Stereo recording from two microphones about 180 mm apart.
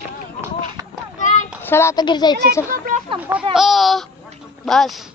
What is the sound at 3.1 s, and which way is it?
Speech, 10° right (ahead or behind).